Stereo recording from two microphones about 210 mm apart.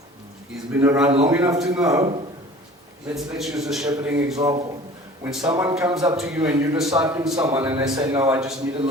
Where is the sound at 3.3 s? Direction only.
Centre (ahead or behind).